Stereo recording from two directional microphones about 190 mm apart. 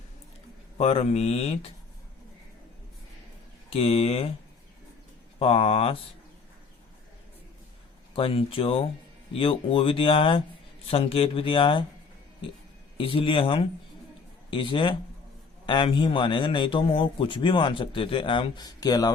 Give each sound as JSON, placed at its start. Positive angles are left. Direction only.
{"t": 0.8, "sound": "speech", "side_deg": 30}
{"t": 3.7, "sound": "speech", "side_deg": 30}
{"t": 5.4, "sound": "speech", "side_deg": 30}
{"t": 8.1, "sound": "a man's voice", "side_deg": 30}
{"t": 13.0, "sound": "a man's voice", "side_deg": 30}